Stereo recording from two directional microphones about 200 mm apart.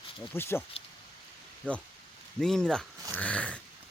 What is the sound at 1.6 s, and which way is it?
Speech, 5° left (ahead or behind).